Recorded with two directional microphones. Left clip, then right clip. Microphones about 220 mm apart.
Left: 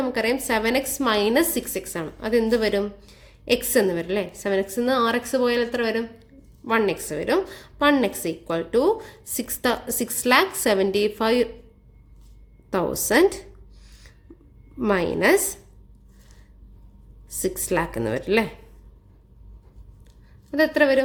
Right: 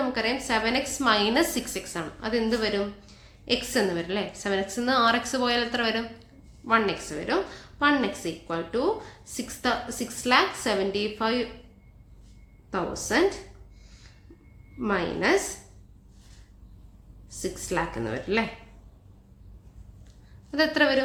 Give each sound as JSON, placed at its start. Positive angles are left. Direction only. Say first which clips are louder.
{"t": 0.0, "sound": "a woman's voice", "louder": "left 4 dB", "side_deg": 35}
{"t": 12.7, "sound": "a woman's voice", "louder": "left 6 dB", "side_deg": 40}
{"t": 14.8, "sound": "a woman's voice", "louder": "left 5 dB", "side_deg": 40}
{"t": 17.2, "sound": "a woman's voice", "louder": "left 6 dB", "side_deg": 40}
{"t": 20.5, "sound": "a woman's voice", "louder": "left 4 dB", "side_deg": 30}